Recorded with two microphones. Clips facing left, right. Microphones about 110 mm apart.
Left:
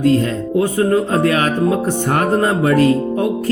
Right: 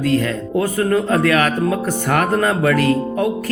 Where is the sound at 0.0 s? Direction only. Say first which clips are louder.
Left 3 dB; 25° left (ahead or behind).